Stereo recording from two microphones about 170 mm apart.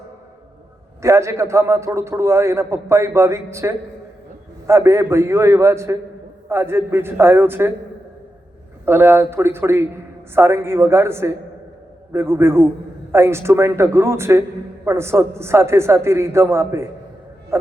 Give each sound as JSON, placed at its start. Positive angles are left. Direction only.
{"t": 1.0, "sound": "a man's voice", "side_deg": -15}
{"t": 8.8, "sound": "a man's voice", "side_deg": -15}